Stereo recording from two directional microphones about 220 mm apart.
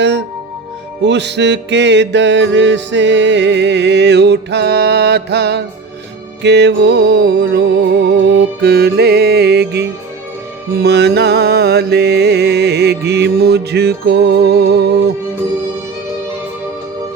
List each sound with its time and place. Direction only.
1.0 s music: 50° right (ahead or behind)